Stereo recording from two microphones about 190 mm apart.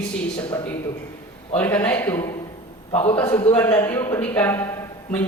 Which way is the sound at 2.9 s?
30° left (ahead or behind).